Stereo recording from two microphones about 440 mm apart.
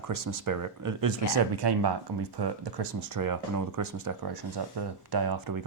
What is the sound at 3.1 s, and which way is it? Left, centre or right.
Speech, right.